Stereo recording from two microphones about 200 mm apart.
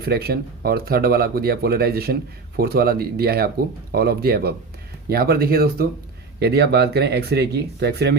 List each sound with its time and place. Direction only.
0.0 s speech: 50° right (ahead or behind)